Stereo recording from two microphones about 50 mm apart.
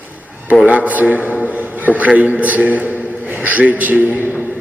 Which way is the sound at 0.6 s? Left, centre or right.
Right.